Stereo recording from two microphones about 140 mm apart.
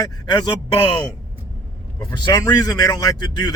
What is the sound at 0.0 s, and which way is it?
Speech, 30° left (ahead or behind).